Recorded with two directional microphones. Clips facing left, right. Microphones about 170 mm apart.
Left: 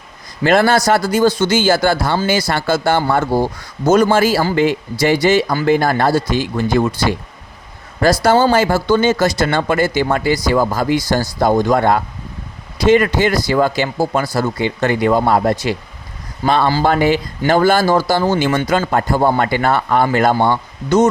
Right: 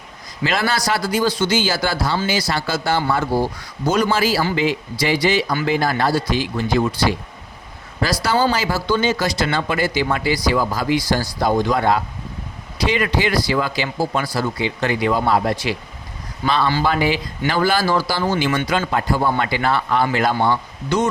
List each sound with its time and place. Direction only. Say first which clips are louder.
0.4 s speech: left 8 dB; 50° left (ahead or behind)